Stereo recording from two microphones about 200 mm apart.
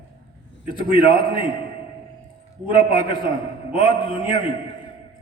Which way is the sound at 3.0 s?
25° left (ahead or behind).